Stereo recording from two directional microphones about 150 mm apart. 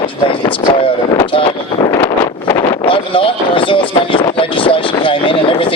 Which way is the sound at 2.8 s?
35° left (ahead or behind).